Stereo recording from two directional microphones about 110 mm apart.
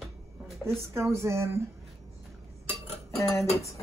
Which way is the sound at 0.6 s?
25° right (ahead or behind).